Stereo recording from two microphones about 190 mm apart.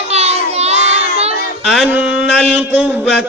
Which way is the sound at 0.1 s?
35° right (ahead or behind).